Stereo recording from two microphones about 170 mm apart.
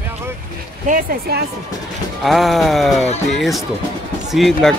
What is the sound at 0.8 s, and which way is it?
Speech, 55° right (ahead or behind).